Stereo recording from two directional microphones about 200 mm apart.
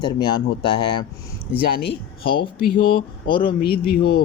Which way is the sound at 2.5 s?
50° left (ahead or behind).